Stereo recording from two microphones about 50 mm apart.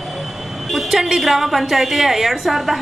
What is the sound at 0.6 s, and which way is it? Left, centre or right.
A woman's voice, centre.